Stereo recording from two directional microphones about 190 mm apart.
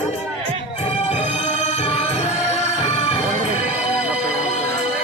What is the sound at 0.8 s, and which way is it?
Music, 30° left (ahead or behind).